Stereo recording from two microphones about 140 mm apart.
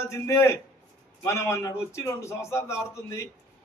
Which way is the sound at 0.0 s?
20° left (ahead or behind).